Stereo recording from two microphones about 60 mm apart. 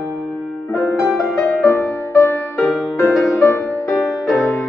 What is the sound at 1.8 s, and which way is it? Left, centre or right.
Music, left.